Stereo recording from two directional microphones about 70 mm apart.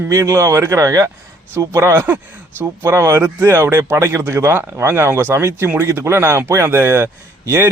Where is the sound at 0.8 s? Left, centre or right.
Right.